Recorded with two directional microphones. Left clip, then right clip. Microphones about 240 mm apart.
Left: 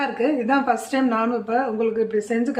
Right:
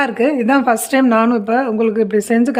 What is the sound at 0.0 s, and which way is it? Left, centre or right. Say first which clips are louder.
Speech: right 7 dB; right.